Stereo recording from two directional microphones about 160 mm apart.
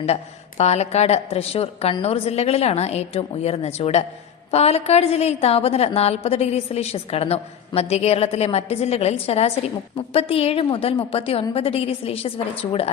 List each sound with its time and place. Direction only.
0.0 s a woman's voice: 40° left (ahead or behind)